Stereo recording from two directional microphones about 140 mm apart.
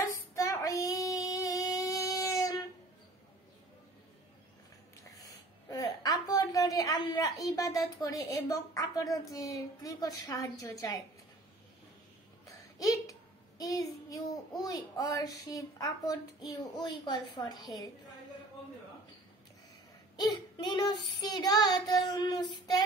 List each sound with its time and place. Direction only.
0.3 s female singing: 25° left (ahead or behind)
5.2 s a woman's voice: 25° left (ahead or behind)
12.4 s a sound: 25° left (ahead or behind)
13.6 s child singing: 25° left (ahead or behind)
14.6 s a child's voice: 25° left (ahead or behind)
20.2 s child singing: 30° left (ahead or behind)
21.2 s a child's voice: 30° left (ahead or behind)